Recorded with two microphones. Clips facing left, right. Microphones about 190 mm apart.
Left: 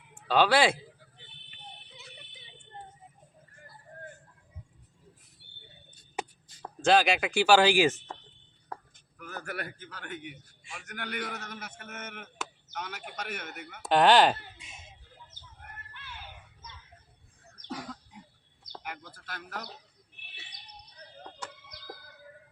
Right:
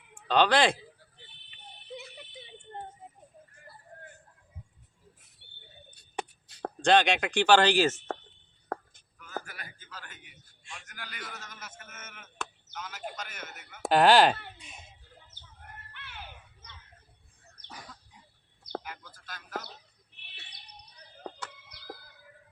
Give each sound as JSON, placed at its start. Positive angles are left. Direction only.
{"t": 0.3, "sound": "speech", "side_deg": 5}
{"t": 6.5, "sound": "a sound", "side_deg": -65}
{"t": 6.8, "sound": "speech", "side_deg": 5}
{"t": 9.1, "sound": "a man's voice", "side_deg": 65}
{"t": 13.9, "sound": "speech", "side_deg": 0}
{"t": 15.9, "sound": "a sound", "side_deg": -65}
{"t": 17.7, "sound": "cough", "side_deg": 80}
{"t": 18.8, "sound": "speech", "side_deg": 70}